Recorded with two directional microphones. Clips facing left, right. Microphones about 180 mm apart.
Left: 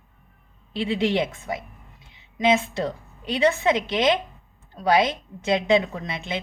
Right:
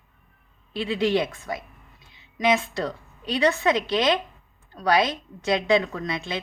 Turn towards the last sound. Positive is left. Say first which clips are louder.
# right 1 dB
turn(degrees=20)  # may be behind; listen again after turning